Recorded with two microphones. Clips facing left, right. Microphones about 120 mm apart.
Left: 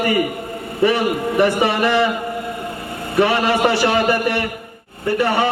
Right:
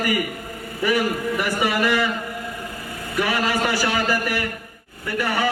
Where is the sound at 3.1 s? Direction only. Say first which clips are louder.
Left 7 dB; 25° left (ahead or behind).